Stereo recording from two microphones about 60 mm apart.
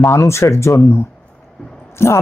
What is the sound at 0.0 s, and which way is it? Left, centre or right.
Speech, left.